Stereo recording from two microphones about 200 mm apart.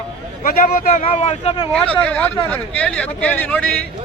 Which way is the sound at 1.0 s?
30° left (ahead or behind).